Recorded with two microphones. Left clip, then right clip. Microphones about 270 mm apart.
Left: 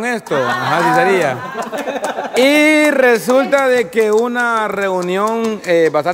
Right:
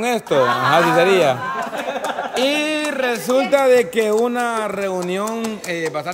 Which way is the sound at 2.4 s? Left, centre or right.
Centre.